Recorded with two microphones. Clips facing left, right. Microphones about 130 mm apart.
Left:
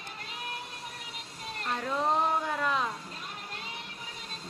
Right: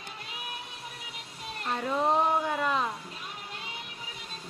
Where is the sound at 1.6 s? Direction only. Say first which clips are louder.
Right 2 dB; 5° right (ahead or behind).